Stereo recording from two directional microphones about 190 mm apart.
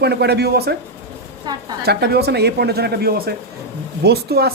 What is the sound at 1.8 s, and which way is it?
A woman's voice, 60° right (ahead or behind).